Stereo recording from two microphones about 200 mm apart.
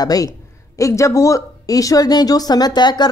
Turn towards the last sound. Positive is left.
turn(degrees=20)  # may be behind; listen again after turning